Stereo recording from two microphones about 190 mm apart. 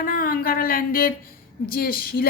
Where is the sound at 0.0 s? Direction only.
50° left (ahead or behind).